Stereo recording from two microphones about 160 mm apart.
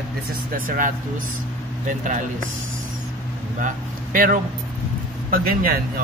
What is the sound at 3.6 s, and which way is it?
Speech, 60° right (ahead or behind).